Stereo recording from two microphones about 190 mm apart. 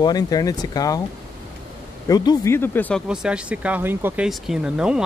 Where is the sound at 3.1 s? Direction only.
5° right (ahead or behind).